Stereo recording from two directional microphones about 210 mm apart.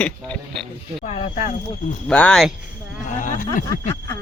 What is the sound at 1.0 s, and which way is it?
Speech, 30° left (ahead or behind).